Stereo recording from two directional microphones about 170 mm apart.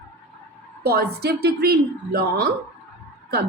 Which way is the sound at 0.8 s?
70° right (ahead or behind).